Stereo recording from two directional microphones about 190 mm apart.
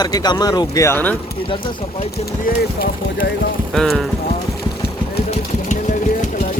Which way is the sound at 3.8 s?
Centre (ahead or behind).